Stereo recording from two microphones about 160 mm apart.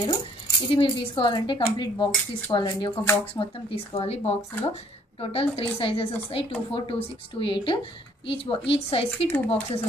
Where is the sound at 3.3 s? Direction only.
35° left (ahead or behind).